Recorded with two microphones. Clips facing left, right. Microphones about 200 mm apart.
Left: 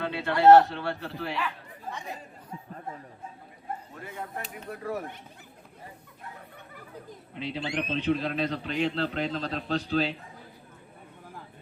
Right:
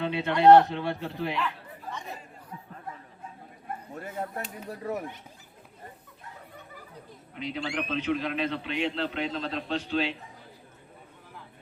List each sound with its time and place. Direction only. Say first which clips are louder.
0.0 s speech: even; 20° right (ahead or behind)
1.9 s chatter: left 1 dB; 15° left (ahead or behind)
4.0 s speech: right 4 dB; 45° right (ahead or behind)
4.7 s speech: even; 20° right (ahead or behind)
7.3 s a man's voice: left 1 dB; 30° left (ahead or behind)